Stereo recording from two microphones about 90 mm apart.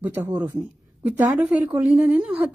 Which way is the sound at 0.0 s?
20° right (ahead or behind).